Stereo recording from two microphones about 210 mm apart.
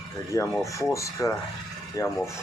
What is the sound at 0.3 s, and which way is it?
Speech, 15° left (ahead or behind).